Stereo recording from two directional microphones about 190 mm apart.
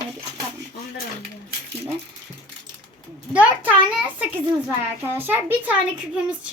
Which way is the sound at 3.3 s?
5° right (ahead or behind).